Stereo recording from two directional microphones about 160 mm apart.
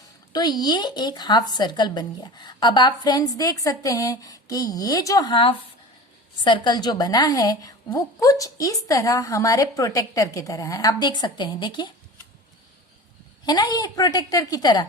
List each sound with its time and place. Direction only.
0.3 s speech: 25° left (ahead or behind)
13.4 s speech: 25° left (ahead or behind)